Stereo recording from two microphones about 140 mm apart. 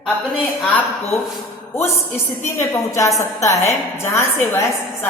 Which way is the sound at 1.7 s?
20° left (ahead or behind).